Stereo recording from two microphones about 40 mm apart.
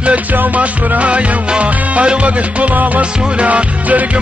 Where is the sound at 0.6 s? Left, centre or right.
Right.